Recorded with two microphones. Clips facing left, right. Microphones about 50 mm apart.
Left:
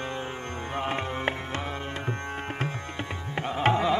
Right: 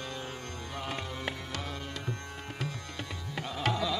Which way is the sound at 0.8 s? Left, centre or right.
Left.